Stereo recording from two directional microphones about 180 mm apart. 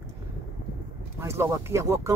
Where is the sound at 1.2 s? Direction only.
15° right (ahead or behind).